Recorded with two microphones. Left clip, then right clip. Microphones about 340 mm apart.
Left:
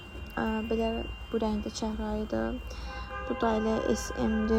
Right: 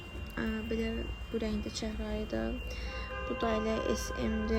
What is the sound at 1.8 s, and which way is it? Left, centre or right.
Speech, left.